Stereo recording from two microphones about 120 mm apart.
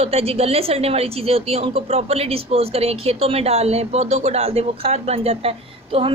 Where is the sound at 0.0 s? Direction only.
55° right (ahead or behind).